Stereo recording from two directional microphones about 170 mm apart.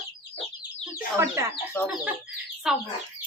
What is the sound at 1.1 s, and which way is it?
Speech, 15° right (ahead or behind).